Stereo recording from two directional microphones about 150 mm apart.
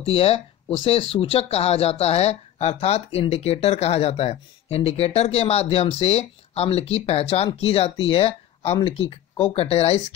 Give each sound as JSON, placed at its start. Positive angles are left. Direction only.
{"t": 0.0, "sound": "speech", "side_deg": 40}